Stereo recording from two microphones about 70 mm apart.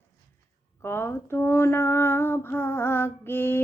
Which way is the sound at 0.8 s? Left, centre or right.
Left.